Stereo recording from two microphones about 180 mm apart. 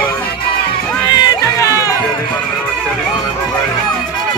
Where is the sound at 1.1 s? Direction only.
20° left (ahead or behind).